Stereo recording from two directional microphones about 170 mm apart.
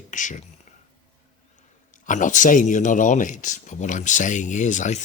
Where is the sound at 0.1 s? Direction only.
45° left (ahead or behind).